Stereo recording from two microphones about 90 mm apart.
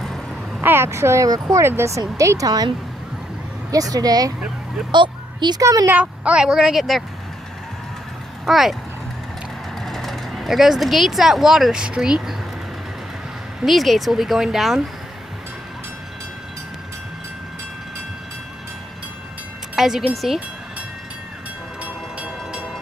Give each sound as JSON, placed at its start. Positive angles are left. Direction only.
{"t": 0.0, "sound": "a sound", "side_deg": 0}
{"t": 0.6, "sound": "speech", "side_deg": -25}
{"t": 3.7, "sound": "speech", "side_deg": -45}
{"t": 4.9, "sound": "a sound", "side_deg": -60}
{"t": 5.6, "sound": "speech", "side_deg": -40}
{"t": 5.9, "sound": "speech", "side_deg": -15}
{"t": 8.5, "sound": "speech", "side_deg": -5}
{"t": 9.8, "sound": "speech", "side_deg": 0}
{"t": 13.6, "sound": "speech", "side_deg": 0}
{"t": 19.7, "sound": "speech", "side_deg": -5}
{"t": 21.8, "sound": "train", "side_deg": -15}